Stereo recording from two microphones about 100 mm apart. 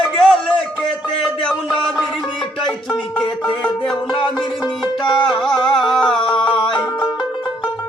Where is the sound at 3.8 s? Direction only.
Centre (ahead or behind).